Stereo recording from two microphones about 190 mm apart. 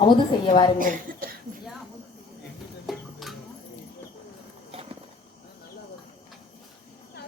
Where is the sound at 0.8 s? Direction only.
50° right (ahead or behind).